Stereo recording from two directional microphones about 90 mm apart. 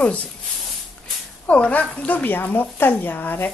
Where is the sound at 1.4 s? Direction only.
15° left (ahead or behind).